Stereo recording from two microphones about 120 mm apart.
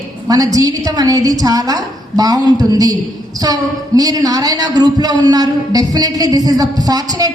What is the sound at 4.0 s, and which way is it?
A man's voice, 30° right (ahead or behind).